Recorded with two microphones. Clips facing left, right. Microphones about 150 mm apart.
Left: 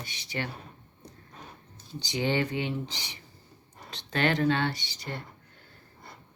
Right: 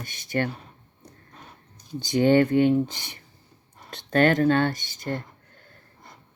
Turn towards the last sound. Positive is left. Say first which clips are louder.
# right 8 dB
turn(degrees=-50)  # may be behind; listen again after turning